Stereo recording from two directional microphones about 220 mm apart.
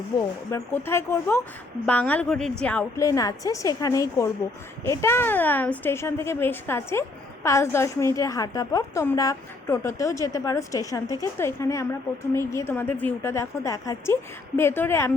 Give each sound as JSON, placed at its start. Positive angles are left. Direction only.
{"t": 0.1, "sound": "a woman's voice", "side_deg": 20}
{"t": 3.0, "sound": "a woman's voice", "side_deg": 15}